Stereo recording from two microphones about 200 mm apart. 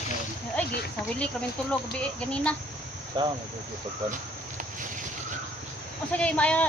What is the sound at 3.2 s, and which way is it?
Speech, 20° right (ahead or behind).